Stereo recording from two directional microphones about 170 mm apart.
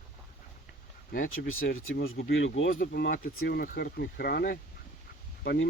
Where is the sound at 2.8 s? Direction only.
75° left (ahead or behind).